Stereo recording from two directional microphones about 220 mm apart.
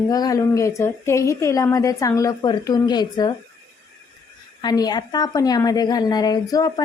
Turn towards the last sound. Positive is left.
turn(degrees=15)  # may be behind; listen again after turning